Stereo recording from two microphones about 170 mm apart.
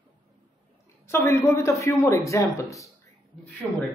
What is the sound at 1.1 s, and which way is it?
A man's voice, 15° left (ahead or behind).